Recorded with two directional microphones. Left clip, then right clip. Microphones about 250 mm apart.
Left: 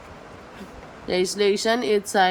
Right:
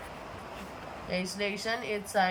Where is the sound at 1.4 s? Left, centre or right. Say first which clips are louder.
Left 13 dB; left.